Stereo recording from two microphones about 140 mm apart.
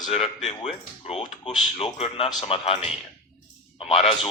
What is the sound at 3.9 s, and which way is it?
Speech, 45° left (ahead or behind).